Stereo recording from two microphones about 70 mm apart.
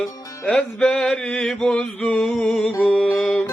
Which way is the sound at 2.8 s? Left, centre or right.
Centre.